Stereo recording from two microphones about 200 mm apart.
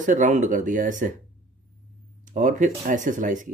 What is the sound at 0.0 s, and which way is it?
Speech, 40° right (ahead or behind).